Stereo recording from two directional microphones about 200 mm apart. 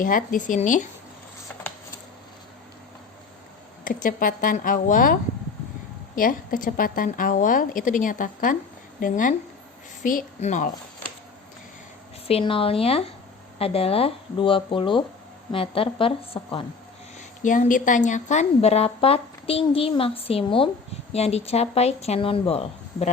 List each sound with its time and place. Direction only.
0.0 s speech: 45° left (ahead or behind)
3.8 s a woman's voice: 45° left (ahead or behind)
6.1 s a woman's voice: 45° left (ahead or behind)
12.3 s a woman's voice: 25° left (ahead or behind)
17.2 s a woman's voice: 40° left (ahead or behind)